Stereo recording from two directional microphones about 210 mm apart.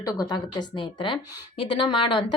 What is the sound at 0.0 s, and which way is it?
A woman's voice, 15° left (ahead or behind).